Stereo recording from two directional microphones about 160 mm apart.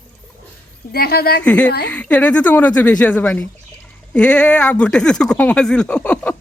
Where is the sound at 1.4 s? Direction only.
10° left (ahead or behind).